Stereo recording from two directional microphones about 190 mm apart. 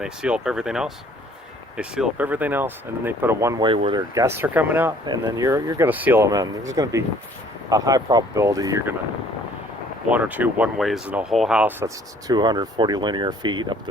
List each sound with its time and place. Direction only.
0.0 s speech: 5° right (ahead or behind)
10.1 s speech: 10° right (ahead or behind)
12.3 s speech: 20° right (ahead or behind)